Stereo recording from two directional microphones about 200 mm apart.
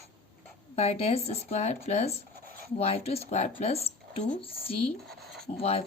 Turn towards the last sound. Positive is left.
turn(degrees=30)  # may be behind; listen again after turning